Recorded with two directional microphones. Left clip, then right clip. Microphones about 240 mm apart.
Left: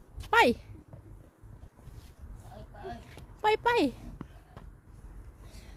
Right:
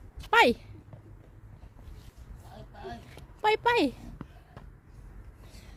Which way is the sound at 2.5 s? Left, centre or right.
Right.